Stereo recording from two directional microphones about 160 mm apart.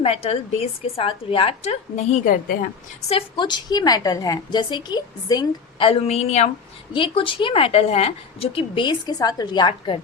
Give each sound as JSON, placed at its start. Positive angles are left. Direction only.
{"t": 0.0, "sound": "a woman's voice", "side_deg": 40}
{"t": 3.1, "sound": "a woman's voice", "side_deg": 35}
{"t": 5.9, "sound": "a woman's voice", "side_deg": 40}
{"t": 6.9, "sound": "a woman's voice", "side_deg": 30}